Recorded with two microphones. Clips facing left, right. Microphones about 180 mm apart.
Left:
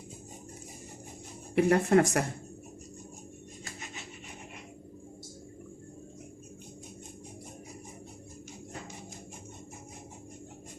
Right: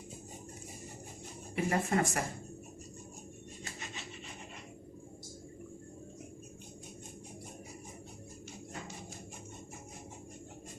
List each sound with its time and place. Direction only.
1.5 s speech: 70° left (ahead or behind)